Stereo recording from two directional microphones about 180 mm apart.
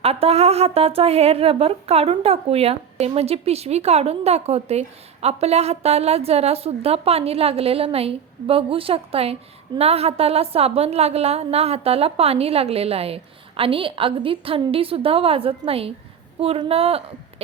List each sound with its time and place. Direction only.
0.0 s a woman's voice: 35° right (ahead or behind)